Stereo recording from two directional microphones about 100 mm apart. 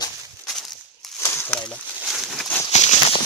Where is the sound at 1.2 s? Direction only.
25° left (ahead or behind).